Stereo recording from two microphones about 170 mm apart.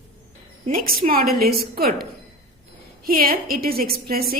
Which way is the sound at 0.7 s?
60° right (ahead or behind).